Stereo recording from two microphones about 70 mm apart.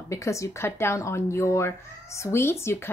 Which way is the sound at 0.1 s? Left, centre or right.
Left.